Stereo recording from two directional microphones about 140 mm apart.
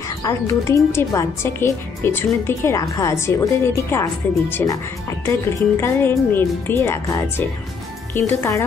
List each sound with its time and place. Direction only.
0.2 s a woman's voice: 20° left (ahead or behind)